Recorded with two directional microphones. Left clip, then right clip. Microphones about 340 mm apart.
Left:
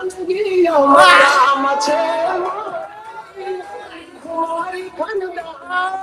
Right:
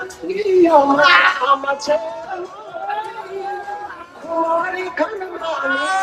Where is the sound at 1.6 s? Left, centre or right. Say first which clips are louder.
Left 3 dB; right.